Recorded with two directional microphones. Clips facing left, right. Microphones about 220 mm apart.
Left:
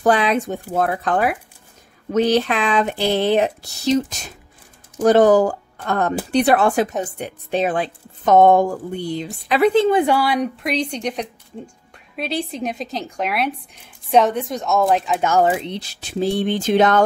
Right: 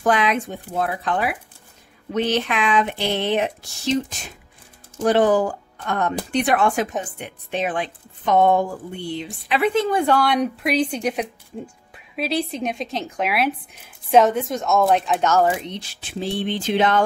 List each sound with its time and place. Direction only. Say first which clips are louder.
0.0 s a woman's voice: left 3 dB; 35° left (ahead or behind)
0.7 s a woman's voice: left 3 dB; 50° left (ahead or behind); by 10.0 s 25° left (ahead or behind)
10.0 s speech: even; 5° left (ahead or behind)
15.2 s speech: left 2 dB; 15° left (ahead or behind)
15.6 s a woman's voice: left 3 dB; 35° left (ahead or behind)